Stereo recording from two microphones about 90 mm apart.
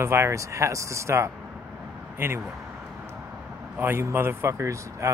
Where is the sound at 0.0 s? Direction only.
30° right (ahead or behind).